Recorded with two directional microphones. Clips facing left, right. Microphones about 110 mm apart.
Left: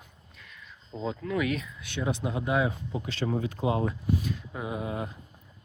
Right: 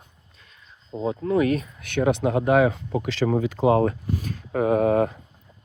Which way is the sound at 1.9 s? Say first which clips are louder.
Right 10 dB; 65° right (ahead or behind).